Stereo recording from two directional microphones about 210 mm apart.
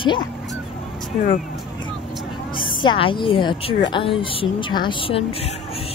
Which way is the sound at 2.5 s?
25° left (ahead or behind).